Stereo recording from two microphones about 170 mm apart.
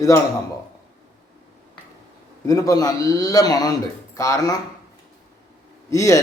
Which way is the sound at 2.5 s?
20° left (ahead or behind).